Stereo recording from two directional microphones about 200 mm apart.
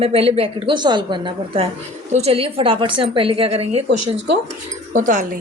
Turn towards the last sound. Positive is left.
turn(degrees=-40)  # may be behind; listen again after turning